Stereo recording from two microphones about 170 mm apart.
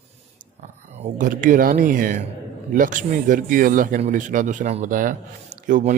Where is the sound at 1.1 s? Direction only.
50° right (ahead or behind).